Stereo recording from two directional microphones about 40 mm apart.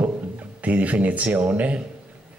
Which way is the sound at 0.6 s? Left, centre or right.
Right.